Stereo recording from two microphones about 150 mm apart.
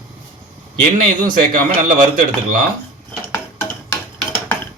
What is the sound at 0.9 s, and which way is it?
Speech, 65° right (ahead or behind).